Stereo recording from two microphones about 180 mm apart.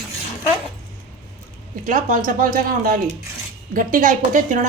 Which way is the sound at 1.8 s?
45° right (ahead or behind).